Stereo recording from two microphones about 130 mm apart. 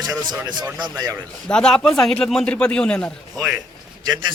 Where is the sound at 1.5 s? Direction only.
5° left (ahead or behind).